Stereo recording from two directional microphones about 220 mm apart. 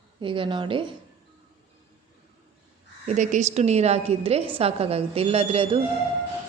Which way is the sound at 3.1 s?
35° right (ahead or behind).